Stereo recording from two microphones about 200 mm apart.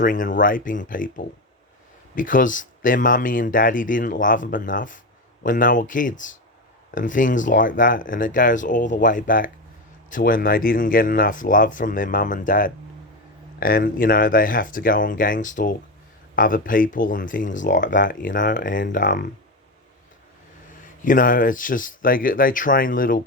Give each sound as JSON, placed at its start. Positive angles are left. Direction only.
{"t": 0.0, "sound": "speech", "side_deg": 40}
{"t": 20.8, "sound": "speech", "side_deg": 40}